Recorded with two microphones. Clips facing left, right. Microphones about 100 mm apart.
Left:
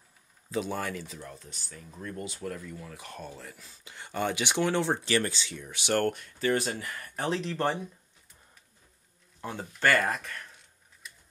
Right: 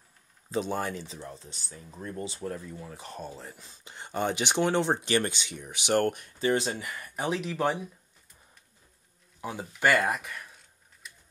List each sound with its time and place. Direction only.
0.5 s speech: 30° right (ahead or behind); by 7.9 s 5° right (ahead or behind)
9.4 s speech: 10° right (ahead or behind)
11.0 s a sound: centre (ahead or behind)